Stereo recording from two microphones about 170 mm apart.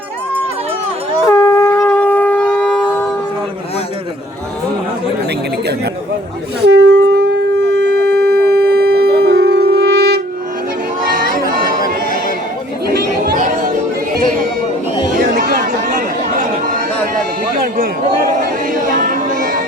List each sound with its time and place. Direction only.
1.3 s shofar: 20° left (ahead or behind)
6.6 s wind instrument: 80° right
7.8 s shofar: 70° right (ahead or behind)
11.1 s chatter: 55° right (ahead or behind)
12.9 s chatter: 55° right (ahead or behind)
15.2 s chatter: 55° right (ahead or behind)
18.3 s a sound: 50° right (ahead or behind)